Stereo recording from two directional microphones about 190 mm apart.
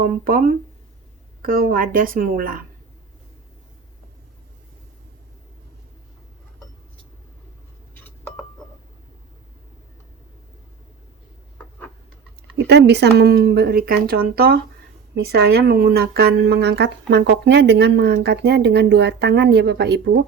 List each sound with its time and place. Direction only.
0.0 s speech: 45° right (ahead or behind)
12.5 s speech: 60° right (ahead or behind)